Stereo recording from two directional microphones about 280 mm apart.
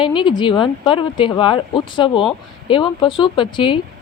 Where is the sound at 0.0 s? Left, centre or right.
Centre.